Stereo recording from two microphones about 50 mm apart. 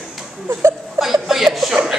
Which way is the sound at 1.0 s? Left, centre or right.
Centre.